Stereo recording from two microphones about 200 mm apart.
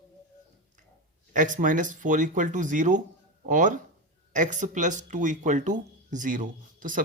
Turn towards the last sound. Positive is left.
turn(degrees=-40)  # may be behind; listen again after turning